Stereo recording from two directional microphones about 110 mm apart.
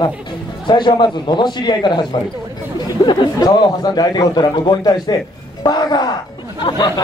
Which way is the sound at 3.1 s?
40° left (ahead or behind).